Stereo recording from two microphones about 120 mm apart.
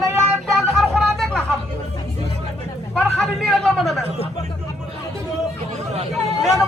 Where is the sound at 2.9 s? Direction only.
Centre (ahead or behind).